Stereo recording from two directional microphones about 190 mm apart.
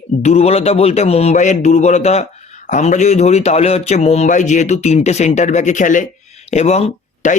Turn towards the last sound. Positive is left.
turn(degrees=35)  # may be behind; listen again after turning